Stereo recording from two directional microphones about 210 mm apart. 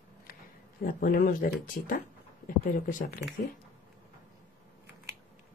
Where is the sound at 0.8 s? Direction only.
45° left (ahead or behind).